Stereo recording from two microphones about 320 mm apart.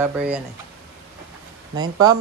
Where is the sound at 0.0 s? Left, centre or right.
Centre.